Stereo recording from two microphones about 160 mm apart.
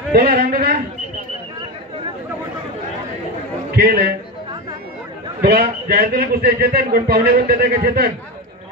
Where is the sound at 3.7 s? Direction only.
75° right (ahead or behind).